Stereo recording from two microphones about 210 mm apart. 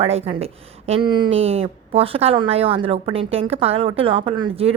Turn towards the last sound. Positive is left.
turn(degrees=-25)  # may be behind; listen again after turning